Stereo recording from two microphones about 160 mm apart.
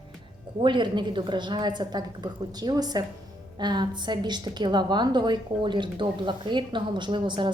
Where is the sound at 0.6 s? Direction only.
30° right (ahead or behind).